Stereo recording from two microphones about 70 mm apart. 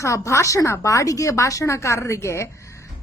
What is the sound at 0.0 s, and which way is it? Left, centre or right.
A woman's voice, left.